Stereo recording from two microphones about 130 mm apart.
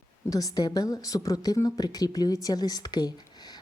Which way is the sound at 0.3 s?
30° left (ahead or behind).